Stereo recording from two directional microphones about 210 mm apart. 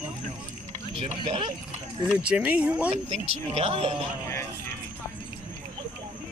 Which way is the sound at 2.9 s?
30° right (ahead or behind).